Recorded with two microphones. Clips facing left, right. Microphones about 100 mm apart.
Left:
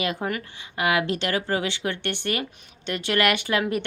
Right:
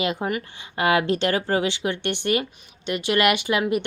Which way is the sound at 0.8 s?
30° right (ahead or behind).